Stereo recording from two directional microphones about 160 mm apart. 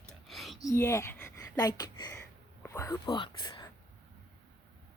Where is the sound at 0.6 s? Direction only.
15° left (ahead or behind).